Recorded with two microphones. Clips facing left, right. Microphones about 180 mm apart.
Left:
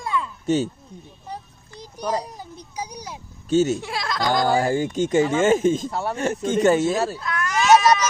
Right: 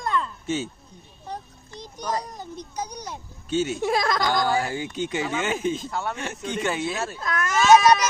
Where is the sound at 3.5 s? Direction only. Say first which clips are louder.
Left 6 dB; 40° left (ahead or behind).